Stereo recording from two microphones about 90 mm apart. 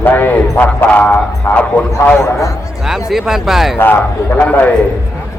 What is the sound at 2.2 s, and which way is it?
Speech, 35° left (ahead or behind).